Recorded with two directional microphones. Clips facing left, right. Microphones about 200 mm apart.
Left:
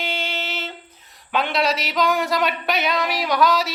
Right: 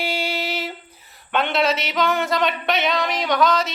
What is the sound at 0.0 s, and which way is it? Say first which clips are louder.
Speech: right 3 dB; 10° right (ahead or behind).